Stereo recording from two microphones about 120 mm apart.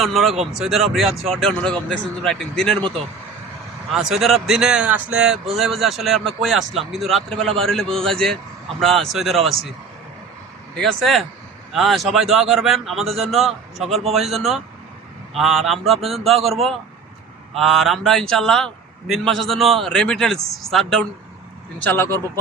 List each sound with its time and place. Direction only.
0.0 s a man's voice: centre (ahead or behind)
3.9 s a man's voice: centre (ahead or behind)
10.8 s a man's voice: 5° left (ahead or behind)
21.8 s speech: 20° left (ahead or behind)